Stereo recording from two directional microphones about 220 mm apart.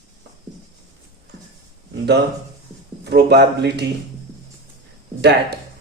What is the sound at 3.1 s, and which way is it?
Speech, 50° right (ahead or behind).